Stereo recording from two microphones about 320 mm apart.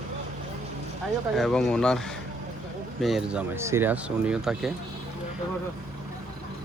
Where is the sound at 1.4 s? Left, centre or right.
Centre.